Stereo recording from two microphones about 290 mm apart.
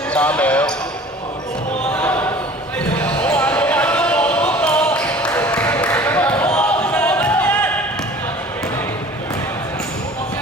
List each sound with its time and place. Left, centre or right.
0.1 s basketball bounce: centre
1.9 s basketball bounce: centre